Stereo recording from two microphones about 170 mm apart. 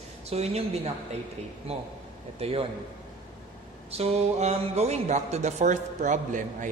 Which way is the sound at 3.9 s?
40° right (ahead or behind).